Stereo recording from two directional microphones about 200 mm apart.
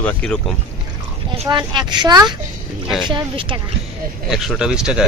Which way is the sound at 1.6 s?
20° right (ahead or behind).